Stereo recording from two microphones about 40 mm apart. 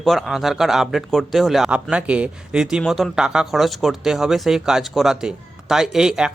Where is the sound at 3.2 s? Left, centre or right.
Centre.